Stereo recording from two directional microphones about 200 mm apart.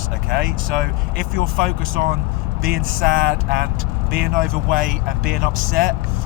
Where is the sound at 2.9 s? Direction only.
75° right (ahead or behind).